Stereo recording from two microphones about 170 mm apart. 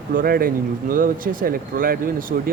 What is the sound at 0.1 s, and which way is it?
Speech, 60° right (ahead or behind).